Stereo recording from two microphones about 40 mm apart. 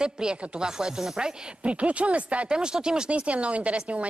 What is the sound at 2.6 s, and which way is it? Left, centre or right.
Speech, centre.